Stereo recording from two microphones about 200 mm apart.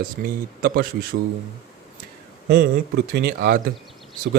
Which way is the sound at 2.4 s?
45° right (ahead or behind).